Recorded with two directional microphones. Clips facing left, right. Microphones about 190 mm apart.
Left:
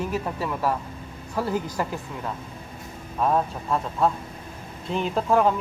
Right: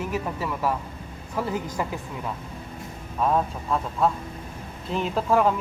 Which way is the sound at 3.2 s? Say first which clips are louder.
Even; centre (ahead or behind).